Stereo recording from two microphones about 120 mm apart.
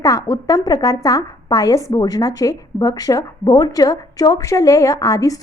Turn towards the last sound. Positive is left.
turn(degrees=30)  # may be behind; listen again after turning